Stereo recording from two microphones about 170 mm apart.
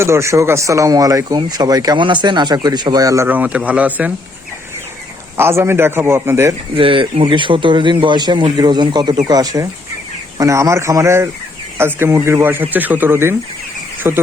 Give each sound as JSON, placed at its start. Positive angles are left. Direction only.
{"t": 0.0, "sound": "speech", "side_deg": -15}
{"t": 5.4, "sound": "speech", "side_deg": -15}
{"t": 6.7, "sound": "speech", "side_deg": -30}